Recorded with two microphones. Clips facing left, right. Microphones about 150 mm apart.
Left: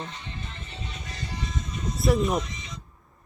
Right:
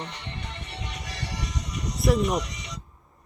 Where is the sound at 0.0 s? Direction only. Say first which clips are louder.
Right 1 dB; 75° right (ahead or behind).